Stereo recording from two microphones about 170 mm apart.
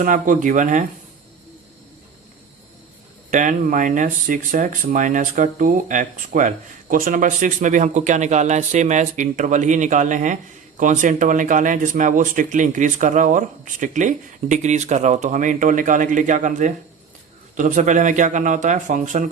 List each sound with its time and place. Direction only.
0.0 s speech: 50° right (ahead or behind)
3.2 s speech: 50° right (ahead or behind)